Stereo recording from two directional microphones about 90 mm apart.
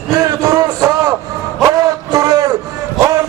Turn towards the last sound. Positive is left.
turn(degrees=-40)  # may be behind; listen again after turning